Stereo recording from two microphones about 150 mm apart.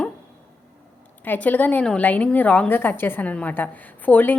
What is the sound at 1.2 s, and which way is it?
A woman's voice, 10° left (ahead or behind).